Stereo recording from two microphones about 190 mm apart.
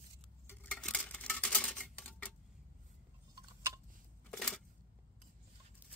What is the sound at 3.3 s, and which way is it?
Tick-tock, 20° right (ahead or behind).